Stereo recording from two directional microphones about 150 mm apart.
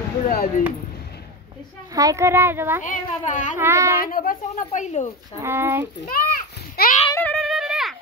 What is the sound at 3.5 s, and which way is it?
Speech, 15° right (ahead or behind).